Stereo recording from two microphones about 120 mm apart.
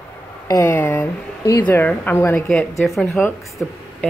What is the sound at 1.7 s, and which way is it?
A woman's voice, 15° left (ahead or behind).